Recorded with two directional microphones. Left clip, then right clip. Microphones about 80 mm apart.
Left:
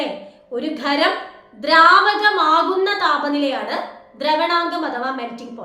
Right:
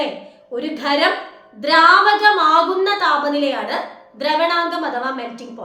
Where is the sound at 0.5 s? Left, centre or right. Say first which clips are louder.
Right 1 dB; right.